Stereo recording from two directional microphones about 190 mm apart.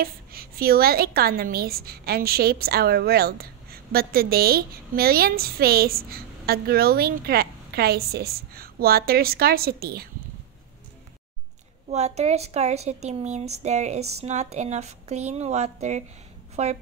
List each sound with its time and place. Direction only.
0.0 s a woman's voice: 50° right (ahead or behind)
11.9 s a woman's voice: 35° right (ahead or behind)